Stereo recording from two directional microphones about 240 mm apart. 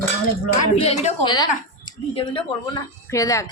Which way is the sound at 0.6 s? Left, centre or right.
Left.